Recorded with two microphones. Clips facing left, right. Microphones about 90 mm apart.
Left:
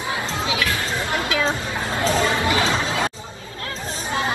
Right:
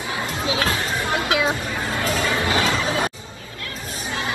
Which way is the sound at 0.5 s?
30° right (ahead or behind).